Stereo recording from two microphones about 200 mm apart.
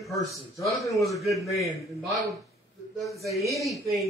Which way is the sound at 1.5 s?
Centre (ahead or behind).